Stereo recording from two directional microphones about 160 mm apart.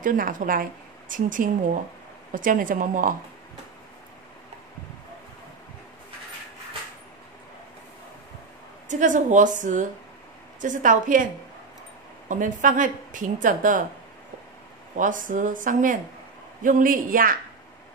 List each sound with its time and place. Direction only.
0.0 s a woman's voice: 55° right (ahead or behind)
8.8 s a woman's voice: 50° right (ahead or behind)
12.3 s a woman's voice: 55° right (ahead or behind)
15.0 s a woman's voice: 55° right (ahead or behind)